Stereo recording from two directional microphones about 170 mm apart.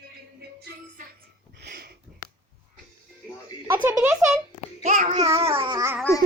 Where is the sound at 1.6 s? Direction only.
65° right (ahead or behind).